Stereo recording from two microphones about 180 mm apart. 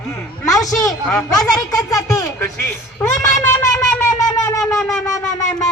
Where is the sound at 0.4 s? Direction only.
20° left (ahead or behind).